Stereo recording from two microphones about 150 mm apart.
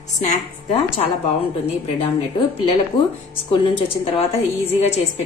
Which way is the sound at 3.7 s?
40° left (ahead or behind).